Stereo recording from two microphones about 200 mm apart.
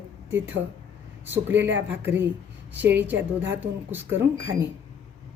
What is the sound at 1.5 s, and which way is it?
Speech, 65° right (ahead or behind).